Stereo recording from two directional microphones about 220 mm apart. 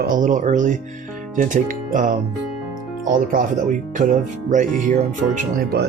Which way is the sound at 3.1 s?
35° right (ahead or behind).